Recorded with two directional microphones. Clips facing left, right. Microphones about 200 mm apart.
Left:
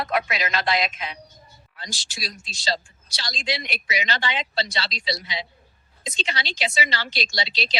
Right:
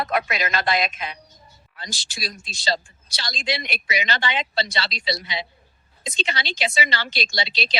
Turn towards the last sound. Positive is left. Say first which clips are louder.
# right 1 dB
turn(degrees=-55)  # may be behind; listen again after turning